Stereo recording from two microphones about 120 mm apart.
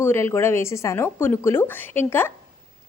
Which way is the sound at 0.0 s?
20° left (ahead or behind).